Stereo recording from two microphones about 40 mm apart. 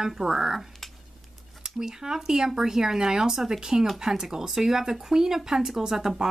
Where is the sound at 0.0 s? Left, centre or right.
Centre.